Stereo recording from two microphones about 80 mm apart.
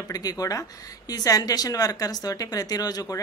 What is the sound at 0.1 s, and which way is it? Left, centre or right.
Speech, left.